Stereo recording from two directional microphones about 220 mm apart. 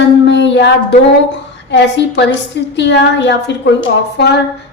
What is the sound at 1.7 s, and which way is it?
A woman's voice, 50° left (ahead or behind).